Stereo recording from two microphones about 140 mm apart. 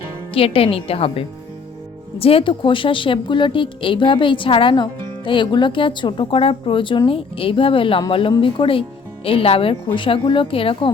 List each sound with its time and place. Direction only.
0.3 s a woman's voice: 40° left (ahead or behind)